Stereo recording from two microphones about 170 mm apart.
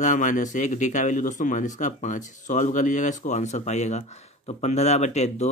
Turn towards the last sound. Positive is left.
turn(degrees=40)  # may be behind; listen again after turning